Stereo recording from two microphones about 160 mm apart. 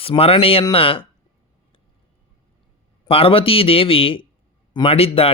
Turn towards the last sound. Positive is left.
turn(degrees=40)  # may be behind; listen again after turning